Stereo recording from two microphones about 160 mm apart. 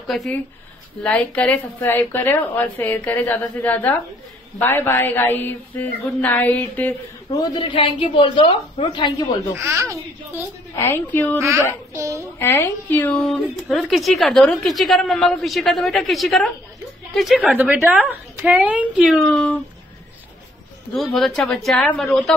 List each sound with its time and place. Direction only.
0.1 s a woman's voice: centre (ahead or behind)
7.2 s a woman's voice: 30° left (ahead or behind)
9.6 s speech: 20° right (ahead or behind)
10.8 s a woman's voice: 15° left (ahead or behind)
11.9 s a child's voice: 20° right (ahead or behind)
12.4 s a woman's voice: 15° left (ahead or behind)
17.5 s speech: 10° right (ahead or behind); by 19.6 s 5° left (ahead or behind)
20.9 s a woman's voice: centre (ahead or behind)